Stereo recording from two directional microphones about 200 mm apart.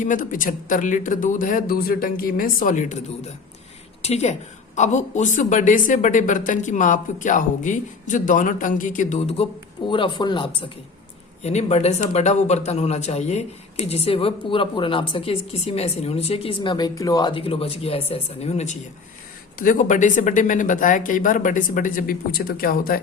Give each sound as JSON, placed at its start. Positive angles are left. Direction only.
{"t": 0.0, "sound": "a man's voice", "side_deg": 40}
{"t": 4.0, "sound": "a man's voice", "side_deg": 35}
{"t": 9.9, "sound": "speech", "side_deg": 25}
{"t": 11.4, "sound": "a man's voice", "side_deg": 30}